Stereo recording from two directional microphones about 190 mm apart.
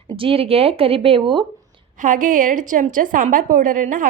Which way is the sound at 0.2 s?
30° right (ahead or behind).